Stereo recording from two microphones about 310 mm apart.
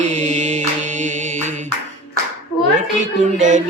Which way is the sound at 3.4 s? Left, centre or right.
Right.